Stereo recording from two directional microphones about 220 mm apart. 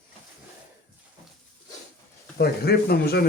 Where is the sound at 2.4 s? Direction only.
45° left (ahead or behind).